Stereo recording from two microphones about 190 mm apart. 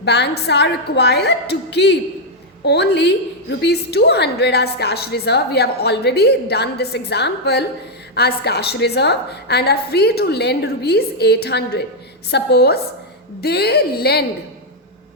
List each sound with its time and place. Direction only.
0.0 s a woman's voice: 60° left (ahead or behind)